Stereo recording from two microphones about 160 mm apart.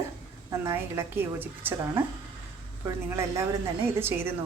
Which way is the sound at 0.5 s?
15° right (ahead or behind).